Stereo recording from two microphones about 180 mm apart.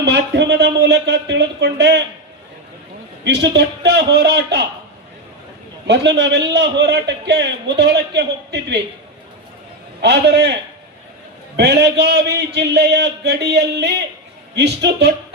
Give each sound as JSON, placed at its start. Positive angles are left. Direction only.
{"t": 0.0, "sound": "a man's voice", "side_deg": -70}
{"t": 3.2, "sound": "a man's voice", "side_deg": -70}
{"t": 5.9, "sound": "a man's voice", "side_deg": -75}
{"t": 10.0, "sound": "a man's voice", "side_deg": -70}